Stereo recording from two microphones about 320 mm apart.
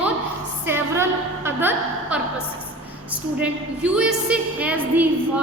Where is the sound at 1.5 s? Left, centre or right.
Centre.